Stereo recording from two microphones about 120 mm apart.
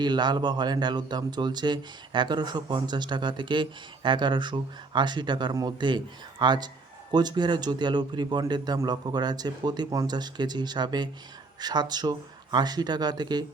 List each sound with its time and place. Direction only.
0.0 s speech: 35° right (ahead or behind)